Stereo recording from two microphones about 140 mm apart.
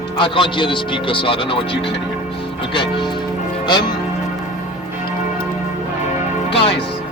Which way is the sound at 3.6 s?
30° left (ahead or behind).